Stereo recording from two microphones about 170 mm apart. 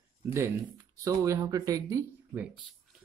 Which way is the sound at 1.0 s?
20° right (ahead or behind).